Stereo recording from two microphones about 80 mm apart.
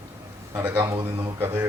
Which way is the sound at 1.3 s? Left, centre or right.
Right.